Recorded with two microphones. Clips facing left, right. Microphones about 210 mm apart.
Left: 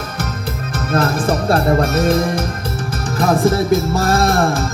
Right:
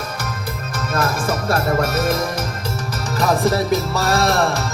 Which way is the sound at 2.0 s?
55° left (ahead or behind).